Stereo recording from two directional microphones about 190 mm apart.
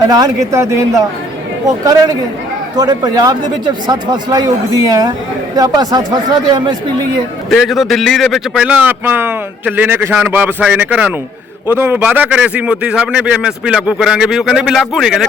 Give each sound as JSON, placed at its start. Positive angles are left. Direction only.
{"t": 0.1, "sound": "a man's voice", "side_deg": -15}
{"t": 7.5, "sound": "a man's voice", "side_deg": 0}